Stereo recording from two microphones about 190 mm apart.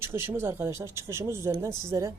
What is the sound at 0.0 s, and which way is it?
A woman's voice, 15° right (ahead or behind).